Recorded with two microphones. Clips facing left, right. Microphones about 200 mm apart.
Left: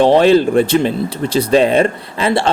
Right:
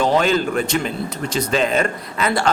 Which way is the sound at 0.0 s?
35° left (ahead or behind).